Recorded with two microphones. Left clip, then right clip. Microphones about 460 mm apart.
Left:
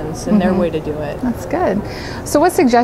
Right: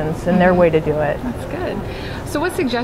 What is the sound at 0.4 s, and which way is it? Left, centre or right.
Speech, right.